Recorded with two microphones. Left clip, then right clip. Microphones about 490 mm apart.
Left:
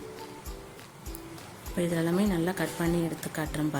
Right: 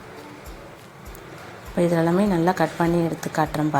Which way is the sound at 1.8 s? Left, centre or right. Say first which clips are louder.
Right 9 dB; left.